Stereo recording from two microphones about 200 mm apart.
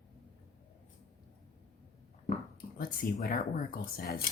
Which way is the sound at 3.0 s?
45° left (ahead or behind).